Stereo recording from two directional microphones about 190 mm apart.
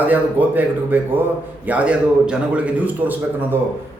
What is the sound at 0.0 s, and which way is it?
A man's voice, 10° right (ahead or behind).